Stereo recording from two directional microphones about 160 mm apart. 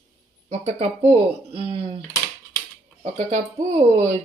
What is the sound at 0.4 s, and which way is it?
Speech, 45° right (ahead or behind).